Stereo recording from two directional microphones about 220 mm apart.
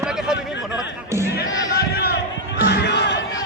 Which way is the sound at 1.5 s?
45° left (ahead or behind).